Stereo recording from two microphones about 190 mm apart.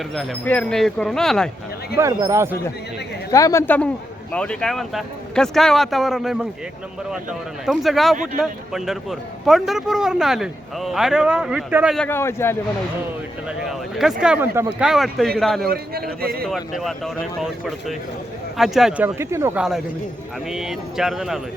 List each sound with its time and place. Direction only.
0.1 s a man's voice: 5° left (ahead or behind)
2.0 s speech: 15° right (ahead or behind)
3.3 s a man's voice: 15° left (ahead or behind); by 6.5 s centre (ahead or behind)
7.6 s a man's voice: centre (ahead or behind)
11.9 s a man's voice: 10° left (ahead or behind)
13.6 s a man's voice: centre (ahead or behind)
15.6 s a man's voice: 55° right (ahead or behind)
16.5 s a man's voice: centre (ahead or behind)
20.5 s a man's voice: centre (ahead or behind)